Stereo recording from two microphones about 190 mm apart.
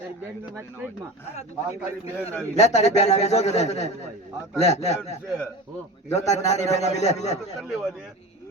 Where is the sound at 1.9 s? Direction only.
15° right (ahead or behind).